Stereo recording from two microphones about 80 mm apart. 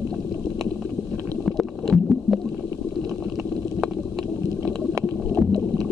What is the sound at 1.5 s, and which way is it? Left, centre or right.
Stomach rumble, centre.